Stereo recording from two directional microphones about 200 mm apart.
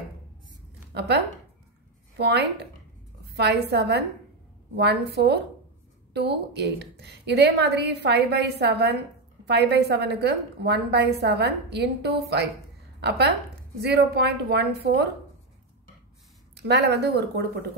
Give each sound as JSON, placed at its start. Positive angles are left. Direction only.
{"t": 0.9, "sound": "a woman's voice", "side_deg": -55}
{"t": 16.6, "sound": "a woman's voice", "side_deg": -55}